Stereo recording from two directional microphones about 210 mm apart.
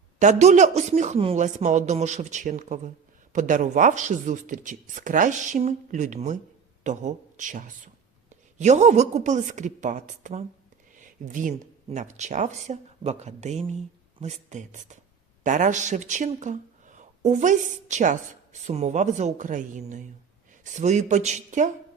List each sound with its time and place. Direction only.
0.2 s speech: 35° right (ahead or behind)